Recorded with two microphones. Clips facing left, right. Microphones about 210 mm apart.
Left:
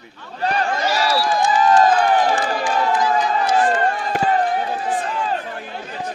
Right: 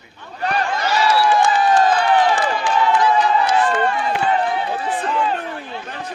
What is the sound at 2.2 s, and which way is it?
Run, 45° left (ahead or behind).